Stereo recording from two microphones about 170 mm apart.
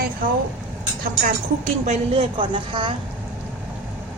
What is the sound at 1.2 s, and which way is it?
A woman's voice, 45° right (ahead or behind).